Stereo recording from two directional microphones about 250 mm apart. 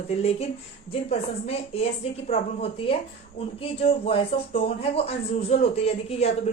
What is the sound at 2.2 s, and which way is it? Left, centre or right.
Speech, left.